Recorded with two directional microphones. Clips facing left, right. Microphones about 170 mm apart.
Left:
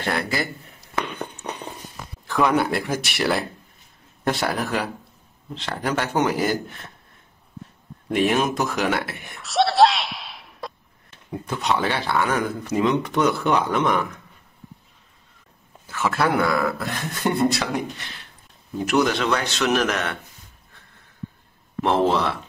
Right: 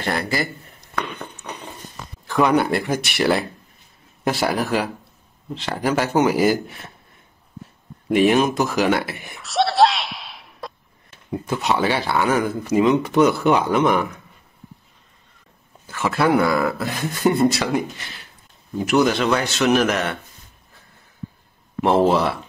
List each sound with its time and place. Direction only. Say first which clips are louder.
0.0 s a man's voice: right 2 dB; centre (ahead or behind)
2.2 s a man's voice: right 3 dB; centre (ahead or behind)
8.1 s speech: right 4 dB; centre (ahead or behind)
15.9 s a man's voice: right 3 dB; centre (ahead or behind)
18.9 s a man's voice: right 3 dB; 5° right (ahead or behind)
21.8 s a man's voice: right 3 dB; 10° right (ahead or behind)